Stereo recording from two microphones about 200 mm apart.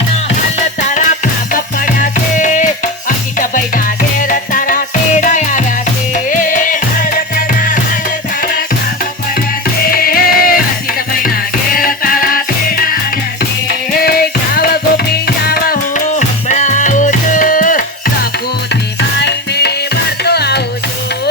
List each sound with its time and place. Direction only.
0.9 s music: 40° left (ahead or behind)
9.8 s music: 45° left (ahead or behind)
18.7 s music: 60° left (ahead or behind)